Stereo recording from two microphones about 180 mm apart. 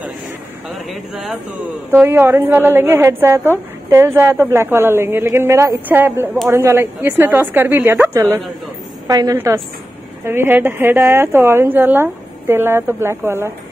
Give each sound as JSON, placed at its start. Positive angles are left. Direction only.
{"t": 0.7, "sound": "a woman's voice", "side_deg": 0}